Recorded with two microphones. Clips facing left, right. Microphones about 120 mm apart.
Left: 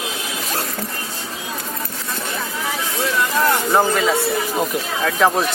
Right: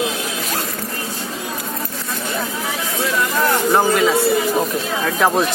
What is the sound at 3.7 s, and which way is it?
Speech, 5° right (ahead or behind).